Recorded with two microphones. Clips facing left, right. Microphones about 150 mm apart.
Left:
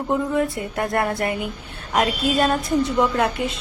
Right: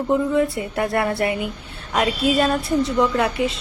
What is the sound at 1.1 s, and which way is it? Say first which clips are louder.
Speech: right 2 dB; 45° left (ahead or behind).